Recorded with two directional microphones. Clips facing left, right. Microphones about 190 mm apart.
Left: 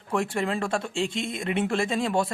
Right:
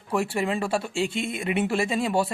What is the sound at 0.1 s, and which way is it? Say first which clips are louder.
Speech: right 1 dB; 5° right (ahead or behind).